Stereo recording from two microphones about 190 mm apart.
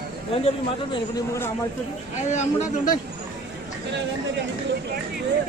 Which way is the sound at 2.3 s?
40° left (ahead or behind).